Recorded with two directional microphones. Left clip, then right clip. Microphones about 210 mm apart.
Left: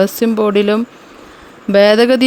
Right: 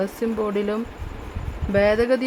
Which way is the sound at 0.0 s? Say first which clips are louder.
Left 11 dB; 40° left (ahead or behind).